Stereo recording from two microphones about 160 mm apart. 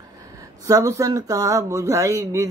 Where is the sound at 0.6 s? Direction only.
20° right (ahead or behind).